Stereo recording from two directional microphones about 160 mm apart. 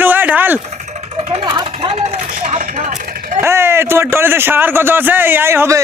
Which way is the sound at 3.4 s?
15° right (ahead or behind).